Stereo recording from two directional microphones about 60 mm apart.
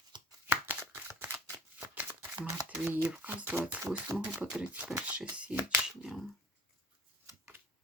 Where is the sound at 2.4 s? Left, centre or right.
Centre.